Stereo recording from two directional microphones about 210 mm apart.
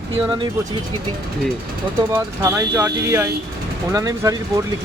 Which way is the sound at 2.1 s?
15° right (ahead or behind).